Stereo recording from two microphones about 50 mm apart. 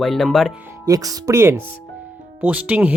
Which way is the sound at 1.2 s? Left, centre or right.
Right.